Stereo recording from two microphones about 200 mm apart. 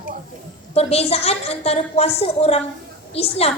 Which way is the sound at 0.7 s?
30° left (ahead or behind).